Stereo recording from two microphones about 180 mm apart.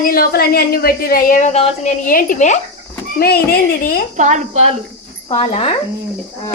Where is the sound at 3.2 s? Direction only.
55° left (ahead or behind).